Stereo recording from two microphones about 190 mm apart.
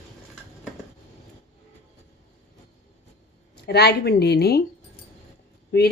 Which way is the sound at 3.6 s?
60° left (ahead or behind).